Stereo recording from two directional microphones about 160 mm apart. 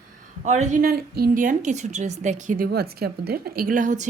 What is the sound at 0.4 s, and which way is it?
Speech, 45° right (ahead or behind).